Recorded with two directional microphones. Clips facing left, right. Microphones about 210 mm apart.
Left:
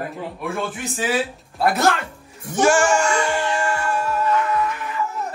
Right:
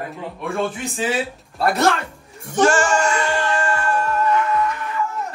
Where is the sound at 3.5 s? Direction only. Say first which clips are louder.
Right 1 dB; 10° left (ahead or behind).